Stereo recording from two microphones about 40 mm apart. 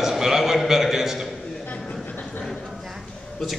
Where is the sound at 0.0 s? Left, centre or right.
Centre.